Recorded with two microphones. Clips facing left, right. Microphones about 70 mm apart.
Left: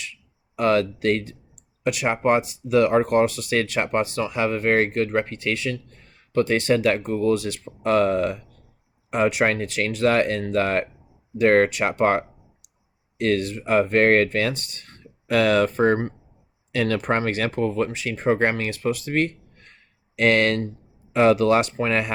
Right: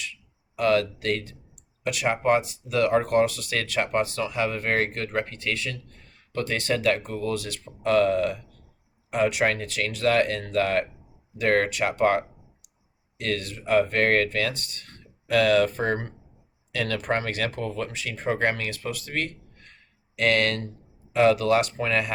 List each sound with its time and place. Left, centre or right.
0.5 s speech: left